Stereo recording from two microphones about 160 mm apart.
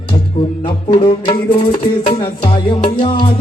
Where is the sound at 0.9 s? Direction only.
30° left (ahead or behind).